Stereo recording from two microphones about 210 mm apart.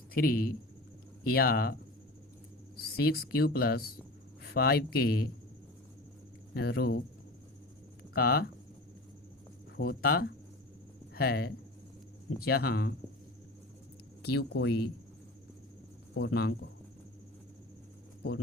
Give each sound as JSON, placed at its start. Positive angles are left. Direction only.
{"t": 0.1, "sound": "a man's voice", "side_deg": 45}
{"t": 2.7, "sound": "speech", "side_deg": 45}
{"t": 6.5, "sound": "speech", "side_deg": 50}
{"t": 8.1, "sound": "speech", "side_deg": 50}
{"t": 9.7, "sound": "speech", "side_deg": 45}
{"t": 14.2, "sound": "speech", "side_deg": 50}
{"t": 16.1, "sound": "speech", "side_deg": 50}